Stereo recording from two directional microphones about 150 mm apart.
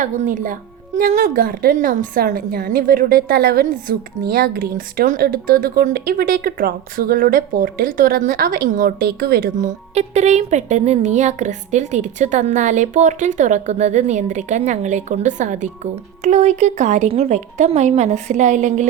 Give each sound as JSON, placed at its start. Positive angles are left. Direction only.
{"t": 0.0, "sound": "a woman's voice", "side_deg": -55}